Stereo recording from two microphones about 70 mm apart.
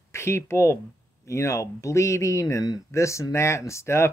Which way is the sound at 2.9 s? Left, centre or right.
Left.